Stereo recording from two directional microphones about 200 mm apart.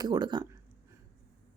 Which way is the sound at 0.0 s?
20° right (ahead or behind).